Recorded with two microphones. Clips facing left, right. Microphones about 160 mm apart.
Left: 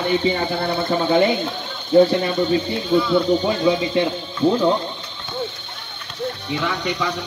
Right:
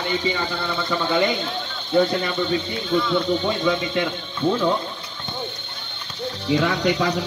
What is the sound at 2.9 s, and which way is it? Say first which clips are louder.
Speech: left 4 dB; 5° left (ahead or behind).